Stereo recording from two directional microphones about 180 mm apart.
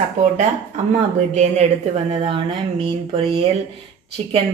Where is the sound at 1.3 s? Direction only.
40° right (ahead or behind).